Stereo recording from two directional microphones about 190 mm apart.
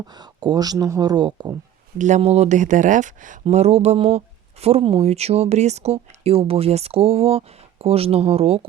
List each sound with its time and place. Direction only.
0.2 s speech: 20° right (ahead or behind)
2.0 s speech: 40° right (ahead or behind)